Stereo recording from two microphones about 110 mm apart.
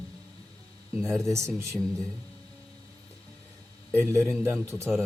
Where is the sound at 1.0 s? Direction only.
25° right (ahead or behind).